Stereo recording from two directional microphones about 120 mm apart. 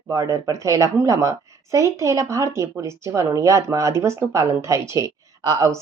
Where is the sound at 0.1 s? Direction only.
25° right (ahead or behind).